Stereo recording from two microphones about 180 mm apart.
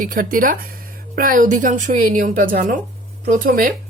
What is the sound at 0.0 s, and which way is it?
Speech, 50° right (ahead or behind).